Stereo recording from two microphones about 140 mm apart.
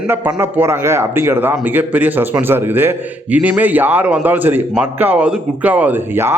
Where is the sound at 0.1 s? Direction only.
15° right (ahead or behind).